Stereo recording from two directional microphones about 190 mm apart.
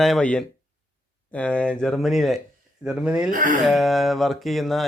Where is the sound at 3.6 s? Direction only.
Centre (ahead or behind).